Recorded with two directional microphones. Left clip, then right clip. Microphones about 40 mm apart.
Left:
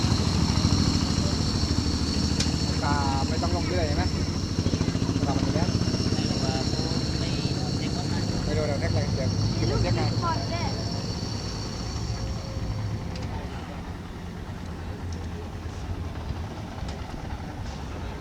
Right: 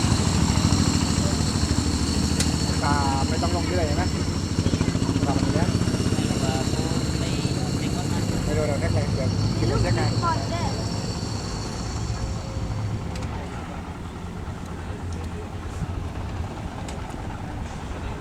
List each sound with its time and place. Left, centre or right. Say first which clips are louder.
0.0 s vehicle: right 3 dB; right
9.8 s vehicle: right 3 dB; left
10.1 s vehicle: right 3 dB; right